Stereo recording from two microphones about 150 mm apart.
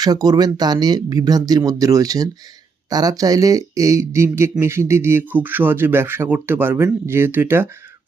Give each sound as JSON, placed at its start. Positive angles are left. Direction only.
{"t": 0.0, "sound": "speech", "side_deg": -25}